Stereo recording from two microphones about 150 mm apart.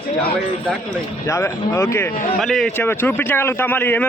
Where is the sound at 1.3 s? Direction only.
20° left (ahead or behind).